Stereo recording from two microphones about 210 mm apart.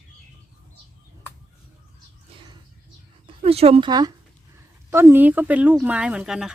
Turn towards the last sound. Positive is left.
turn(degrees=-5)  # may be behind; listen again after turning